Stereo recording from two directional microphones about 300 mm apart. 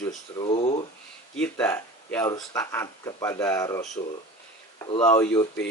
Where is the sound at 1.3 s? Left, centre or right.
Centre.